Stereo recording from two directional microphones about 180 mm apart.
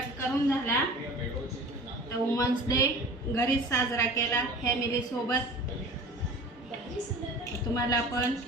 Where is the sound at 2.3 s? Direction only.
20° left (ahead or behind).